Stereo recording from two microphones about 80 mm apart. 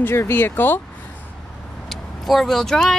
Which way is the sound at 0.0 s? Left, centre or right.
Left.